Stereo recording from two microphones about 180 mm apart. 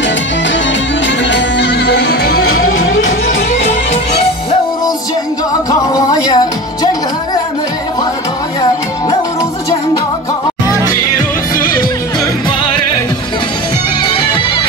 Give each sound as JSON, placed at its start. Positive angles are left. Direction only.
{"t": 1.0, "sound": "music", "side_deg": 80}
{"t": 5.7, "sound": "music", "side_deg": 20}